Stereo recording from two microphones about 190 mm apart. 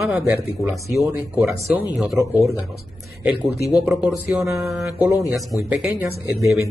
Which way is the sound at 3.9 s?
5° right (ahead or behind).